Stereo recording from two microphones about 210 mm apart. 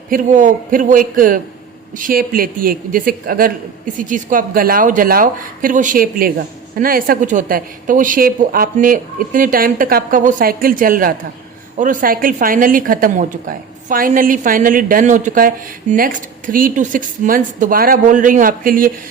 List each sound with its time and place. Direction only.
0.1 s a woman's voice: 35° right (ahead or behind)